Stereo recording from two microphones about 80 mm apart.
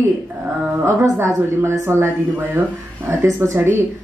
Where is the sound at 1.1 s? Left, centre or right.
Right.